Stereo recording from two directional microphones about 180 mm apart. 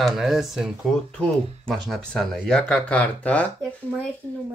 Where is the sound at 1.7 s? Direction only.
Centre (ahead or behind).